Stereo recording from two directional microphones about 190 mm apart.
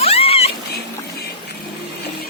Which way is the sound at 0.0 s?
30° left (ahead or behind).